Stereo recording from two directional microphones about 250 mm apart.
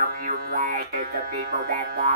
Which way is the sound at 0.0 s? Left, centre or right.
Right.